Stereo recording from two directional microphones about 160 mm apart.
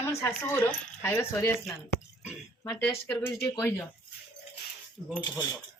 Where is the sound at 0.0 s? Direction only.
15° left (ahead or behind).